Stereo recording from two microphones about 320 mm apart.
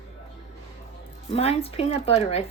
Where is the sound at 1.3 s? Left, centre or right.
Centre.